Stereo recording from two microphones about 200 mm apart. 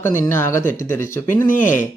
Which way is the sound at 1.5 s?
40° left (ahead or behind).